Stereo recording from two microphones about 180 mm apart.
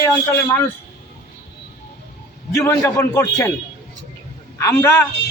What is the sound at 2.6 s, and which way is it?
Speech, 15° left (ahead or behind).